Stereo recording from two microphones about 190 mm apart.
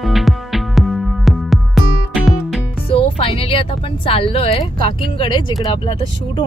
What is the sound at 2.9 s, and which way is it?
Speech, 30° left (ahead or behind).